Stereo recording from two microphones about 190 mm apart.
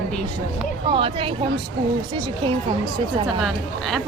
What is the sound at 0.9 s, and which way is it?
Child singing, 30° right (ahead or behind).